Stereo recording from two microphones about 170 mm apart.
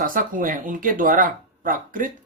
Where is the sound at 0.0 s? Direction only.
50° right (ahead or behind).